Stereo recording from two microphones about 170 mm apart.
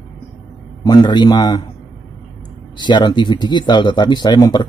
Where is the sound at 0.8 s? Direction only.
25° left (ahead or behind).